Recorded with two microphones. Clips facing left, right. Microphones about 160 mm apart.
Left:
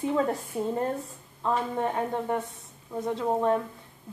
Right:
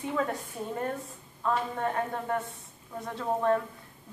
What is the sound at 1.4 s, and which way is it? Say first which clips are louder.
A woman's voice: left 2 dB; 20° left (ahead or behind).